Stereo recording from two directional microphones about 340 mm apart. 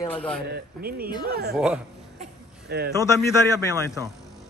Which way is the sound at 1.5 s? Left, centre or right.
Centre.